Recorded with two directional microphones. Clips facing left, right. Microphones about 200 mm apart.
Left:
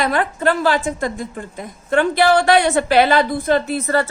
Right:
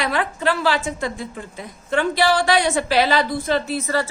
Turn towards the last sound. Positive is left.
turn(degrees=55)  # may be behind; listen again after turning